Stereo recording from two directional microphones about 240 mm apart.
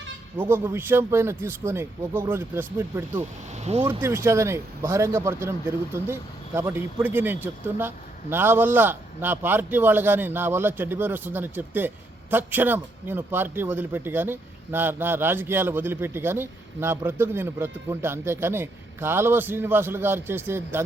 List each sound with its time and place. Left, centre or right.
0.3 s a man's voice: centre
3.5 s speech: right
4.0 s a man's voice: centre